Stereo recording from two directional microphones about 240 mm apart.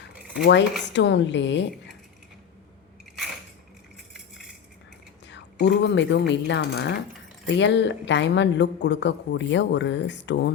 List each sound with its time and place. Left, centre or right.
0.4 s a woman's voice: left
5.3 s a woman's voice: left